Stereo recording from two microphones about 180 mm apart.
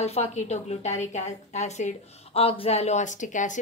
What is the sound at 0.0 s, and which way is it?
A woman's voice, 35° left (ahead or behind).